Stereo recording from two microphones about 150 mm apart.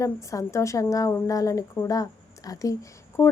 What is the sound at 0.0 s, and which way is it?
A woman's voice, 20° left (ahead or behind).